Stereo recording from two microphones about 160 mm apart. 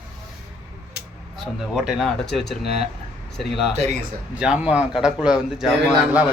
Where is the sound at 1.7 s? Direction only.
5° right (ahead or behind).